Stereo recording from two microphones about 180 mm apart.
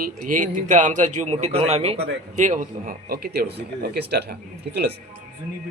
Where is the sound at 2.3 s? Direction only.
45° right (ahead or behind); by 4.2 s 65° right (ahead or behind).